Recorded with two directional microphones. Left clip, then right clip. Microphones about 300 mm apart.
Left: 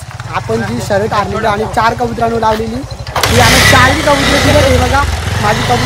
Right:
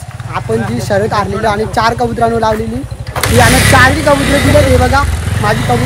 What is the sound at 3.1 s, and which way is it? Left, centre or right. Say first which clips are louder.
Speech: left 1 dB; left.